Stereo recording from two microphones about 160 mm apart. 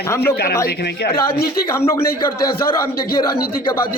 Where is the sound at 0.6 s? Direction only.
75° left (ahead or behind).